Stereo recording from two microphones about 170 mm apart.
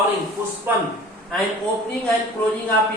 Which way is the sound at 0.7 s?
10° right (ahead or behind).